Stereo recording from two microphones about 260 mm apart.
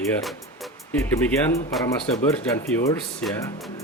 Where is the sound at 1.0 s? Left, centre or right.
Centre.